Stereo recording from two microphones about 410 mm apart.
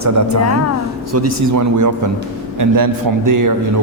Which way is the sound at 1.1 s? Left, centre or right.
Right.